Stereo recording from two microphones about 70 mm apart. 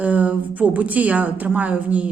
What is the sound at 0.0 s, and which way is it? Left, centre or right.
A woman's voice, right.